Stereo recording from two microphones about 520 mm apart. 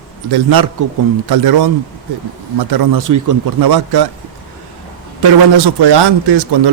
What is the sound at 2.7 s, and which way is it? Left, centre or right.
A man's voice, right.